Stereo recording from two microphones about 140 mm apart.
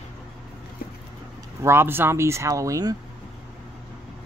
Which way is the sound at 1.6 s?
15° right (ahead or behind).